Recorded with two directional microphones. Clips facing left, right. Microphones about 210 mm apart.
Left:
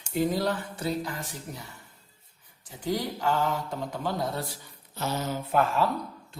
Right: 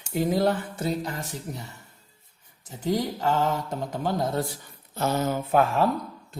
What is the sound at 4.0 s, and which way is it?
Speech, 45° right (ahead or behind).